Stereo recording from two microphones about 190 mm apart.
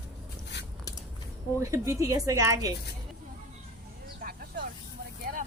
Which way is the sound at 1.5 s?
15° right (ahead or behind).